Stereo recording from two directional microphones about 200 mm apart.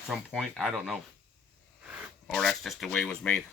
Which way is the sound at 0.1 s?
Centre (ahead or behind).